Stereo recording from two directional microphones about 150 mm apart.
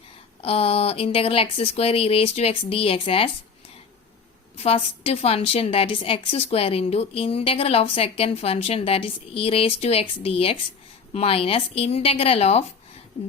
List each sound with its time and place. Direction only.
0.4 s a woman's voice: 40° left (ahead or behind)
4.5 s a woman's voice: 45° left (ahead or behind)